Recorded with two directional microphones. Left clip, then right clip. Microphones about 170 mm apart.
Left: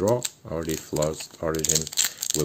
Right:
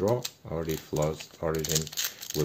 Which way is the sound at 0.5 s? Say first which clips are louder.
Left 2 dB; 30° left (ahead or behind).